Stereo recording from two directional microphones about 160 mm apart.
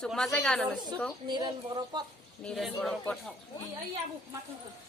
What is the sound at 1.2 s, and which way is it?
Speech, 30° right (ahead or behind).